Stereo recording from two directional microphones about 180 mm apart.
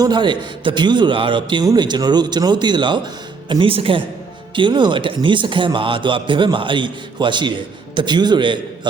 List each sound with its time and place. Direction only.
0.0 s a man's voice: 25° right (ahead or behind)